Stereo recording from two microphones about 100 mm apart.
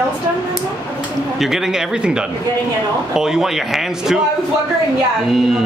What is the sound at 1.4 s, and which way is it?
Speech, 5° right (ahead or behind).